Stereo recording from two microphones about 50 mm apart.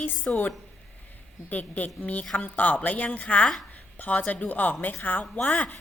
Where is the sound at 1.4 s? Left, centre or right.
Left.